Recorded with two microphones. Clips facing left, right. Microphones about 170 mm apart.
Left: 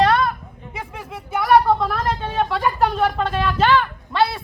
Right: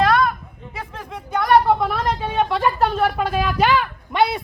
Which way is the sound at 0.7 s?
20° left (ahead or behind).